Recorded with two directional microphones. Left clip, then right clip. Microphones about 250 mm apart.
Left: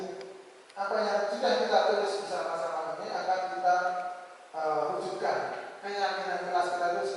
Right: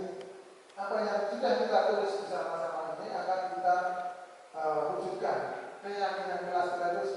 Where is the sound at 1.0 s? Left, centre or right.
Centre.